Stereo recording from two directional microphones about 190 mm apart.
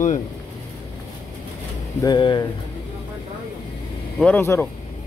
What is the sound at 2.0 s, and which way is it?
Speech, 20° left (ahead or behind).